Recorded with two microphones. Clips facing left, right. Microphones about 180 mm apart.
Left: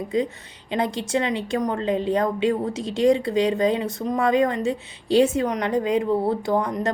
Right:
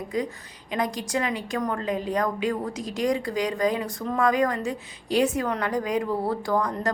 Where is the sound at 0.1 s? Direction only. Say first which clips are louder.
Left 5 dB; 25° left (ahead or behind).